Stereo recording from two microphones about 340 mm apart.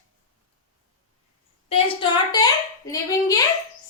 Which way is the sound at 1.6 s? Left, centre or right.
Centre.